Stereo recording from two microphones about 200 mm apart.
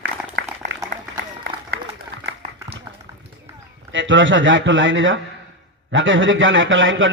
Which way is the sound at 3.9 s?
70° right (ahead or behind).